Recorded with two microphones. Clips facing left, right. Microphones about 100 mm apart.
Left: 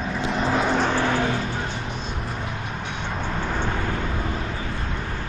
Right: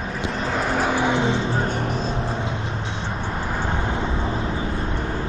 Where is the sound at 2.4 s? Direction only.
30° right (ahead or behind).